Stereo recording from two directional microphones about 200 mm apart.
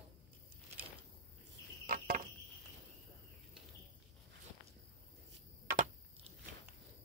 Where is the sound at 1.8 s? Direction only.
40° right (ahead or behind).